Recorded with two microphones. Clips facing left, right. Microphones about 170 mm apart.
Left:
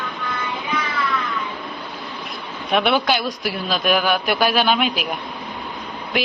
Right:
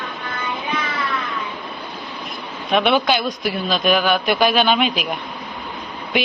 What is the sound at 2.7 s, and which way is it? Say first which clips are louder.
A man's voice: right 1 dB; 5° left (ahead or behind).